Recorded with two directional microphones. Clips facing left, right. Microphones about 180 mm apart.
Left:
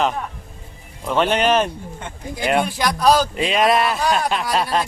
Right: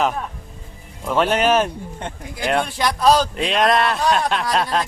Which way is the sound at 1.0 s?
5° right (ahead or behind).